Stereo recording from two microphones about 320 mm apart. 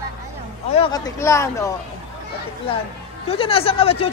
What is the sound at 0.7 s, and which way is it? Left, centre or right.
Speech, centre.